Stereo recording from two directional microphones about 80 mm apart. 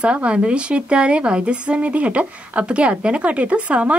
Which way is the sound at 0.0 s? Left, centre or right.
Centre.